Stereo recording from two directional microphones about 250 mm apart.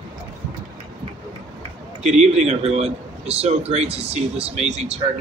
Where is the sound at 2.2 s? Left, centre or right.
Right.